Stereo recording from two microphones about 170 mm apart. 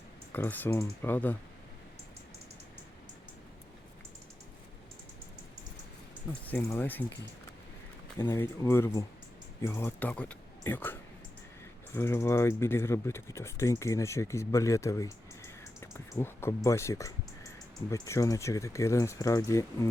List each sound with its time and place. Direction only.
0.3 s speech: 10° left (ahead or behind)
6.5 s speech: 15° left (ahead or behind)
8.2 s speech: 15° left (ahead or behind)
11.9 s speech: 15° left (ahead or behind)